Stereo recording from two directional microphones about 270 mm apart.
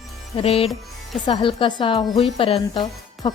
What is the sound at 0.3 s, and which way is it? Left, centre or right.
A woman's voice, left.